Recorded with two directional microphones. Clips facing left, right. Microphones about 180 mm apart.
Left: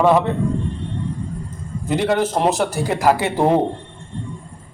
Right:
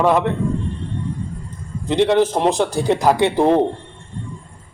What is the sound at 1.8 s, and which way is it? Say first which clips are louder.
Speech: right 4 dB; 25° right (ahead or behind).